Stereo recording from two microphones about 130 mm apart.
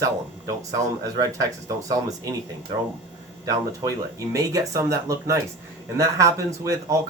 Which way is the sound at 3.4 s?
25° right (ahead or behind).